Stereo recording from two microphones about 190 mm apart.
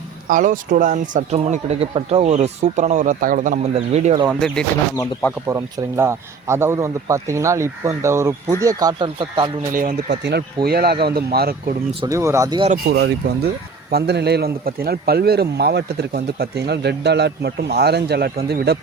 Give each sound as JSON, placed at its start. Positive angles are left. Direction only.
{"t": 0.3, "sound": "speech", "side_deg": -45}
{"t": 4.3, "sound": "speech", "side_deg": 0}
{"t": 5.5, "sound": "speech", "side_deg": -15}
{"t": 10.1, "sound": "speech", "side_deg": -60}
{"t": 11.9, "sound": "speech", "side_deg": -15}
{"t": 12.7, "sound": "speech", "side_deg": -60}